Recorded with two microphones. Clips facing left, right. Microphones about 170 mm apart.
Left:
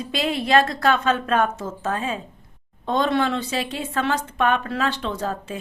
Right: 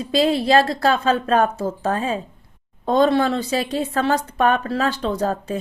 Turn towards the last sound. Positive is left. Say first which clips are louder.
# right 5 dB
turn(degrees=-40)  # may be behind; listen again after turning